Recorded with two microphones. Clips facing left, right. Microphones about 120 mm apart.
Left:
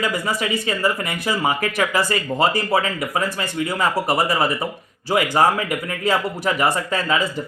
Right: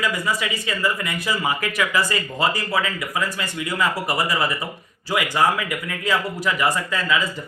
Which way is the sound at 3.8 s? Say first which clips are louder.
Left 3 dB; 30° left (ahead or behind).